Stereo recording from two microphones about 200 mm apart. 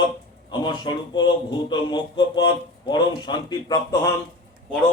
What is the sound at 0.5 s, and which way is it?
A man's voice, 20° left (ahead or behind).